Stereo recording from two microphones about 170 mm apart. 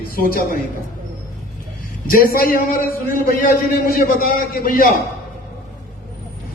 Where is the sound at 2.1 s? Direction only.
60° left (ahead or behind).